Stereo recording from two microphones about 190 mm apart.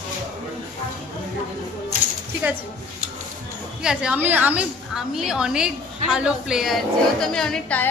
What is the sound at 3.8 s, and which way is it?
A woman's voice, 5° right (ahead or behind).